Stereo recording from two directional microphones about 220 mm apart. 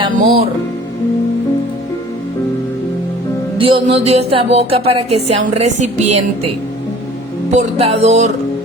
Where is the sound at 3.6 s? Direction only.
25° right (ahead or behind).